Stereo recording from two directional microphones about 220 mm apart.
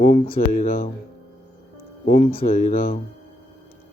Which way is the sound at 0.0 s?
35° left (ahead or behind).